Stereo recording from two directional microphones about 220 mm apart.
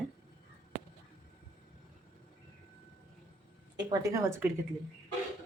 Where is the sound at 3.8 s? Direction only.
15° right (ahead or behind).